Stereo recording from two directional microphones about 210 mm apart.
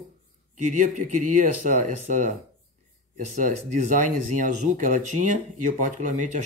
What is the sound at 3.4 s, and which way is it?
Speech, 40° right (ahead or behind).